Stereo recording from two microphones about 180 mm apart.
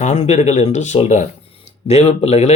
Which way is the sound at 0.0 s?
40° left (ahead or behind).